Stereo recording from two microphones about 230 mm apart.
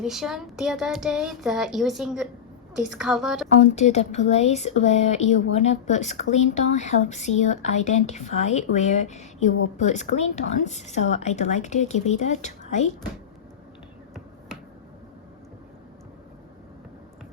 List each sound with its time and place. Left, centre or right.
0.0 s speech: centre
3.6 s speech: left